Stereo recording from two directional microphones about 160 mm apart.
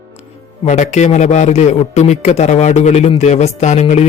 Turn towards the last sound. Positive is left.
turn(degrees=45)  # may be behind; listen again after turning